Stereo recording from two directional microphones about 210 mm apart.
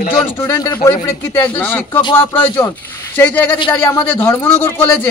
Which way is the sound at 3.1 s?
10° left (ahead or behind).